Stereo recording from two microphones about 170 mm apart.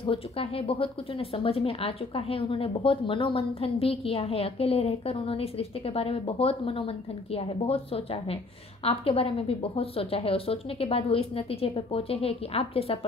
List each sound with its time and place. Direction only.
0.0 s a woman's voice: 35° left (ahead or behind)